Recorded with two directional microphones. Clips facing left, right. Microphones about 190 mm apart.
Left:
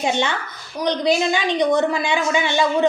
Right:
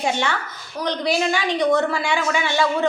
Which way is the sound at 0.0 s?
20° left (ahead or behind).